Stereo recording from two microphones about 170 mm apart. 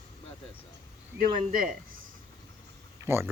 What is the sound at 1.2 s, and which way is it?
Speech, 50° right (ahead or behind).